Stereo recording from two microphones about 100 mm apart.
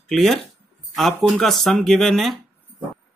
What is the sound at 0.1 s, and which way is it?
Speech, centre (ahead or behind).